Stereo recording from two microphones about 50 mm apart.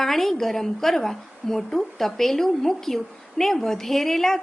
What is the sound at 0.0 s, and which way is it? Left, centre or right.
A woman's voice, centre.